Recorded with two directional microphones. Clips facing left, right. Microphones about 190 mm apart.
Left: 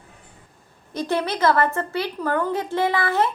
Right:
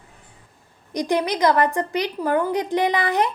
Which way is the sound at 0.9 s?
15° right (ahead or behind).